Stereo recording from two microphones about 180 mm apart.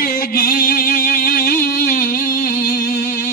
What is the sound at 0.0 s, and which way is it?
Music, 55° left (ahead or behind).